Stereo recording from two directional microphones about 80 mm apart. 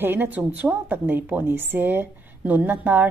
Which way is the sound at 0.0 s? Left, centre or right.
Right.